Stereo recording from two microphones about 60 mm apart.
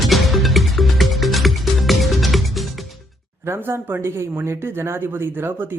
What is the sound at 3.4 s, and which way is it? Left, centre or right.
Speech, right.